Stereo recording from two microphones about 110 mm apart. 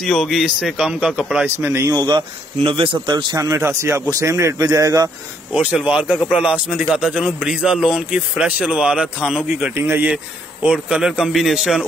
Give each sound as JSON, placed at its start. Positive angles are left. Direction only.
{"t": 0.0, "sound": "a man's voice", "side_deg": 10}
{"t": 0.3, "sound": "a man's voice", "side_deg": -5}
{"t": 1.6, "sound": "speech", "side_deg": -25}
{"t": 2.0, "sound": "speech", "side_deg": -45}
{"t": 2.6, "sound": "a man's voice", "side_deg": -55}
{"t": 5.5, "sound": "a man's voice", "side_deg": -10}
{"t": 9.8, "sound": "speech", "side_deg": -20}
{"t": 10.1, "sound": "a man's voice", "side_deg": -10}